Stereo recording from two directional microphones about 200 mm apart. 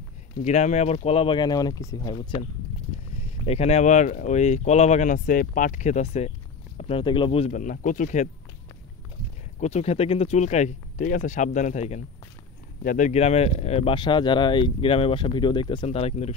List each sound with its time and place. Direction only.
0.4 s speech: 35° left (ahead or behind)
3.4 s speech: 30° left (ahead or behind)
9.6 s speech: 35° left (ahead or behind)